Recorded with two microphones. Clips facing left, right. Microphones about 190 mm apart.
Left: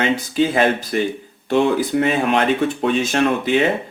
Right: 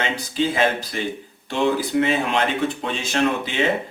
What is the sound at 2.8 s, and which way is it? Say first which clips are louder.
Speech: left 6 dB; 50° left (ahead or behind).